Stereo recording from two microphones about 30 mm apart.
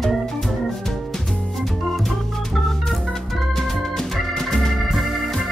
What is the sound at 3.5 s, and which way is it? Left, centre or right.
Organ, centre.